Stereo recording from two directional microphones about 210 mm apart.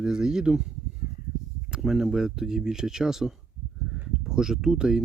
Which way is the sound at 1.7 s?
5° right (ahead or behind).